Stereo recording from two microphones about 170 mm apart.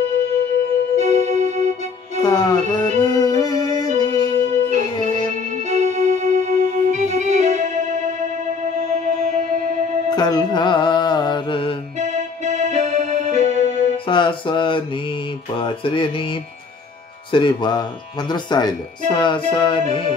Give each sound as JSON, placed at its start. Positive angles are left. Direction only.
{"t": 0.9, "sound": "keyboard", "side_deg": -45}
{"t": 2.2, "sound": "speech", "side_deg": 20}
{"t": 3.0, "sound": "music", "side_deg": 25}
{"t": 5.7, "sound": "music", "side_deg": -45}
{"t": 10.0, "sound": "mantra", "side_deg": 25}
{"t": 12.0, "sound": "keyboard", "side_deg": -45}
{"t": 13.6, "sound": "music", "side_deg": 40}
{"t": 14.1, "sound": "speech", "side_deg": 30}
{"t": 15.5, "sound": "music", "side_deg": 30}
{"t": 17.3, "sound": "speech", "side_deg": 30}